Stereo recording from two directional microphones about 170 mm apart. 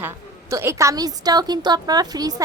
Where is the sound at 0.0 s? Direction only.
15° right (ahead or behind).